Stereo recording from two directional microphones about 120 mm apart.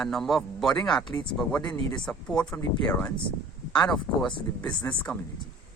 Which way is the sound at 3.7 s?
10° left (ahead or behind).